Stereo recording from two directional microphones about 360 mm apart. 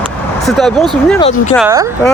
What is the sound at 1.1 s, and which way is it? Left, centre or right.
Speech, centre.